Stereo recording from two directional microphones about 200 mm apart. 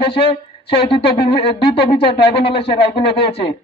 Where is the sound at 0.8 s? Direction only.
25° left (ahead or behind).